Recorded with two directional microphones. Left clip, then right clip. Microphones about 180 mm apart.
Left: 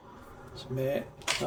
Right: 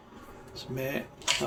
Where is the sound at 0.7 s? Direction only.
35° right (ahead or behind).